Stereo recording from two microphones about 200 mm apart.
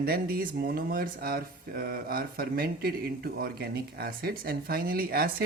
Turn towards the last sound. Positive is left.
turn(degrees=-50)  # may be behind; listen again after turning